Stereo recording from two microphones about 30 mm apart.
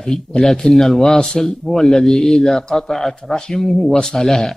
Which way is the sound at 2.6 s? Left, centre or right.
Left.